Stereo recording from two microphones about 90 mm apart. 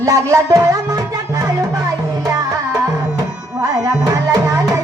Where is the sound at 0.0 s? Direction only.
35° right (ahead or behind).